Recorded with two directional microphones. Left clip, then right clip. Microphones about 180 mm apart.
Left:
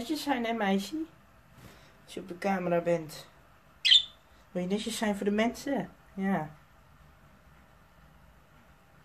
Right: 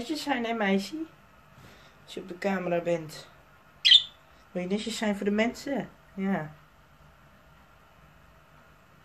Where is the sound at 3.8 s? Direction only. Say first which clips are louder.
Right 3 dB; 5° left (ahead or behind).